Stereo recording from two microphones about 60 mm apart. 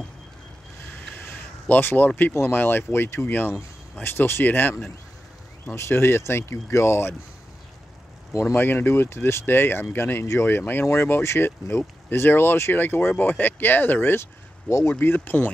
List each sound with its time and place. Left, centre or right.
1.1 s a sound: left
2.5 s speech: left
3.3 s speech: left
5.8 s speech: left
8.5 s speech: left
10.6 s speech: left
15.0 s speech: left